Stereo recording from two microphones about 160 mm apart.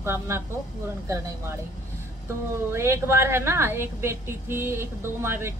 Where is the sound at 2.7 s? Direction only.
15° right (ahead or behind).